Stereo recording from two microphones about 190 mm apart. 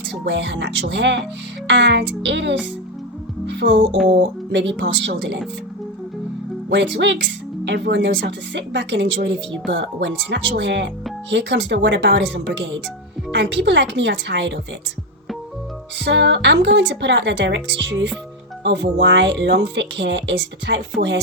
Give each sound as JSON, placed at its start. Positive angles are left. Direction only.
{"t": 0.3, "sound": "speech", "side_deg": -70}
{"t": 1.6, "sound": "music", "side_deg": -65}
{"t": 6.7, "sound": "speech", "side_deg": -65}
{"t": 16.0, "sound": "speech", "side_deg": -65}